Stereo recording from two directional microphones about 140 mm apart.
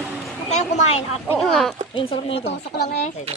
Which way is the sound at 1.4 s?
Centre (ahead or behind).